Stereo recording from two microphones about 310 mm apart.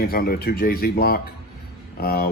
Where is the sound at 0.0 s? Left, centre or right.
Left.